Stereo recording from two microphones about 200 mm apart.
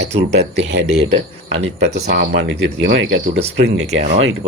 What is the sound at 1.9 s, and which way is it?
Speech, 55° right (ahead or behind).